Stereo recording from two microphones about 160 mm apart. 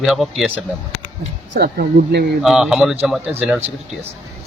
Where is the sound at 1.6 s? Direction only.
85° right.